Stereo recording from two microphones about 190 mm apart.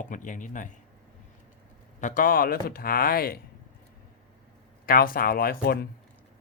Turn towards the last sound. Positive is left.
turn(degrees=55)  # may be behind; listen again after turning